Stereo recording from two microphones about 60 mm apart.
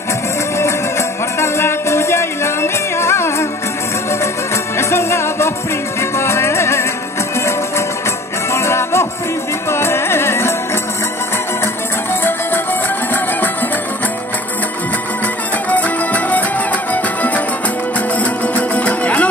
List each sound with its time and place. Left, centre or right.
0.6 s music: left
4.7 s music: left
8.5 s music: left
15.7 s music: left